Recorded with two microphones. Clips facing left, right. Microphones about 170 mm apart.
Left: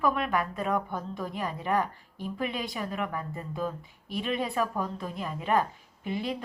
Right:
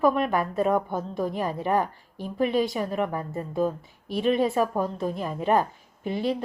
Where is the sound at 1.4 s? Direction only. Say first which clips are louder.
Right 2 dB; 30° right (ahead or behind).